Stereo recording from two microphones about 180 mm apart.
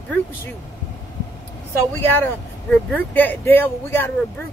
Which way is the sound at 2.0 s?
10° left (ahead or behind).